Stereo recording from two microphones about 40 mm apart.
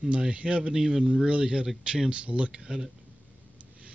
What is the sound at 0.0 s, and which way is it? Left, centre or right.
Speech, right.